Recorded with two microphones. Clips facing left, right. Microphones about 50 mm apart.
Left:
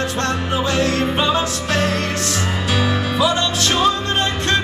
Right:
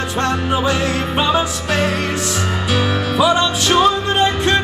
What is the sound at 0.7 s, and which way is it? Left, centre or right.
Music, centre.